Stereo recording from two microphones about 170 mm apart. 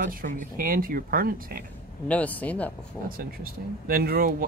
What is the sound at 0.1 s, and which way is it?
Speech, 55° right (ahead or behind).